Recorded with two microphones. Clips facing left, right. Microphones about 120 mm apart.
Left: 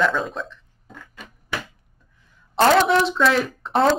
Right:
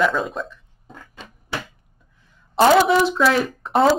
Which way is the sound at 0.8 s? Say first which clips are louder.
Right 1 dB; 25° right (ahead or behind).